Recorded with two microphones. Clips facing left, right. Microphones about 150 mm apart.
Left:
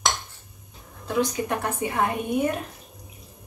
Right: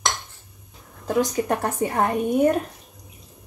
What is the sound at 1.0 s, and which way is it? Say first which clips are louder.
A woman's voice: right 3 dB; 45° right (ahead or behind).